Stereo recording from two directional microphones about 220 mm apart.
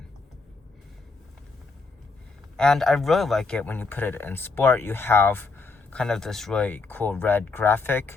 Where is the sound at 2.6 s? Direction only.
Centre (ahead or behind).